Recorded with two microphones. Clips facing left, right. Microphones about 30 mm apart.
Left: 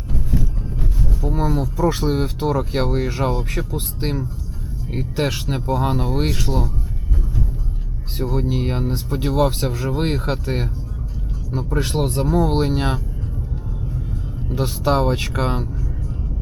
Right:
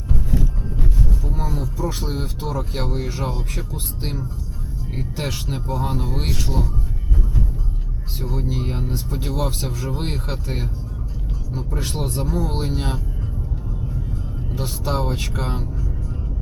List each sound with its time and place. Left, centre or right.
0.1 s vehicle: centre
1.2 s a sound: centre
2.0 s speech: left
4.9 s speech: centre
8.2 s speech: centre
14.5 s speech: centre